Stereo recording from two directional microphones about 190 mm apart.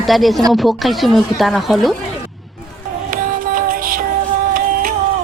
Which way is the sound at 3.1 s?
45° right (ahead or behind).